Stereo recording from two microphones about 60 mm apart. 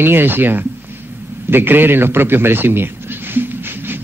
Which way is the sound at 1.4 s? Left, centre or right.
Right.